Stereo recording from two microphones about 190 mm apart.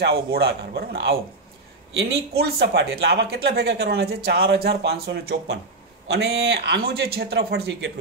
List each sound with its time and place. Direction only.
0.3 s speech: 55° right (ahead or behind)
2.3 s speech: 60° right (ahead or behind)